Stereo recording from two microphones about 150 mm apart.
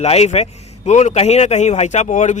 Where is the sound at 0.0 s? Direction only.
45° left (ahead or behind).